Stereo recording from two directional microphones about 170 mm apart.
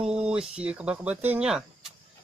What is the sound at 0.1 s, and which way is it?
Speech, 5° right (ahead or behind).